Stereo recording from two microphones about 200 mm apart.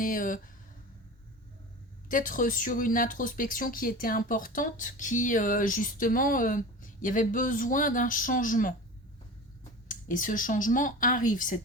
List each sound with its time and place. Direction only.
0.0 s speech: 45° left (ahead or behind)
2.0 s speech: 40° left (ahead or behind)
9.9 s speech: 40° left (ahead or behind)